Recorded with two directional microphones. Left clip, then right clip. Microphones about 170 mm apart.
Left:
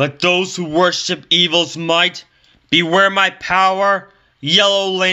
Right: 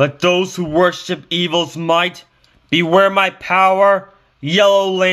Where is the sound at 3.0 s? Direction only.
10° right (ahead or behind).